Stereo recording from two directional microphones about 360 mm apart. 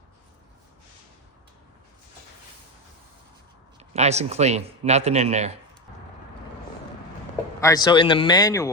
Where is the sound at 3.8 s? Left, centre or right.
Centre.